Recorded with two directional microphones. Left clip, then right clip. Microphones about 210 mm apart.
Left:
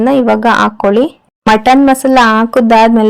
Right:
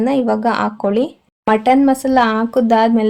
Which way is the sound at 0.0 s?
25° left (ahead or behind).